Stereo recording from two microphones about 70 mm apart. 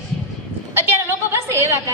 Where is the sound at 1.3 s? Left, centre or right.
Right.